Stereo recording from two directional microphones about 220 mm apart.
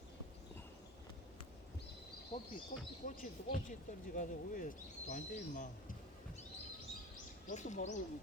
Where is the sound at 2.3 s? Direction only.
30° left (ahead or behind).